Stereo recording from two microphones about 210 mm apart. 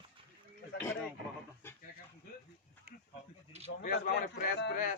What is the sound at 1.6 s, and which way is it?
Speech, 10° left (ahead or behind).